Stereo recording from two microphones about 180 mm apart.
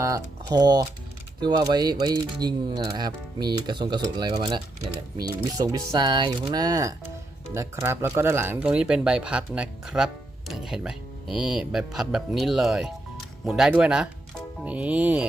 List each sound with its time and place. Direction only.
0.0 s speech: 20° right (ahead or behind)